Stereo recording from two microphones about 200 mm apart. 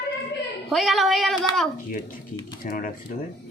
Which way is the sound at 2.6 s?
45° left (ahead or behind).